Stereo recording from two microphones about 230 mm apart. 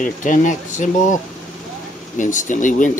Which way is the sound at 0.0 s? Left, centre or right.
Left.